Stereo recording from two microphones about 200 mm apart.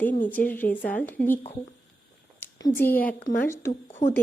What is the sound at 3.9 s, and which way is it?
Speech, 35° left (ahead or behind).